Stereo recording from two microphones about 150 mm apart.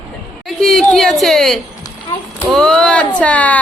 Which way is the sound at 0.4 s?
Centre (ahead or behind).